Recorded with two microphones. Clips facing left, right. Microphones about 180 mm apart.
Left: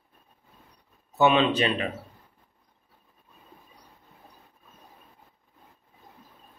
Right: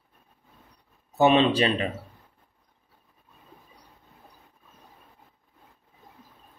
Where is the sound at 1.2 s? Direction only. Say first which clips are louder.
Right 2 dB; 35° right (ahead or behind).